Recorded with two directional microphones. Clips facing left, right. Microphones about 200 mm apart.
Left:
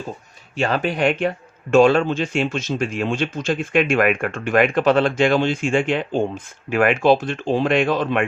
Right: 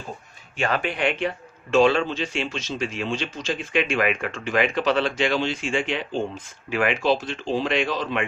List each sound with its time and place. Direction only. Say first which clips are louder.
0.5 s speech: left 4 dB; 35° left (ahead or behind); by 8.2 s 55° left (ahead or behind)